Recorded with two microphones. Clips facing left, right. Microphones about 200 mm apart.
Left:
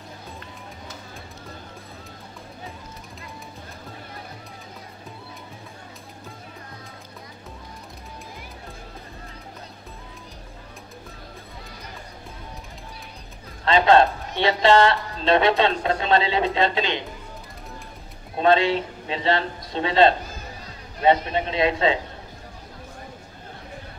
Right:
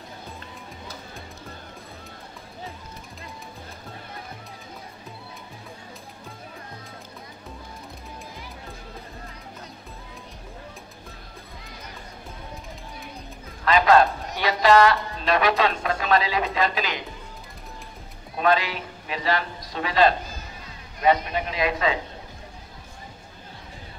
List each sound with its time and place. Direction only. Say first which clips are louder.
13.7 s speech: left 1 dB; 25° left (ahead or behind)
18.4 s a man's voice: left 4 dB; 25° left (ahead or behind)